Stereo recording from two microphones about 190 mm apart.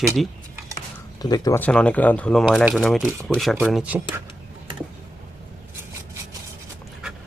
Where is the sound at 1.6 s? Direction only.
5° left (ahead or behind).